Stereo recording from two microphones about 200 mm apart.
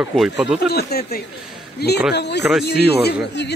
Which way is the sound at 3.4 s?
60° left (ahead or behind).